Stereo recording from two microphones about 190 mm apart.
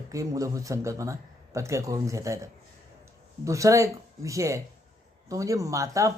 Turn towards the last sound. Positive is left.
turn(degrees=-15)  # may be behind; listen again after turning